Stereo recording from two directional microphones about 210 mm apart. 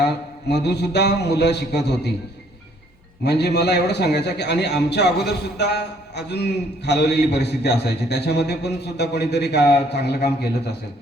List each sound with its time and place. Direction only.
0.0 s a man's voice: 50° left (ahead or behind)
3.2 s a man's voice: 50° left (ahead or behind)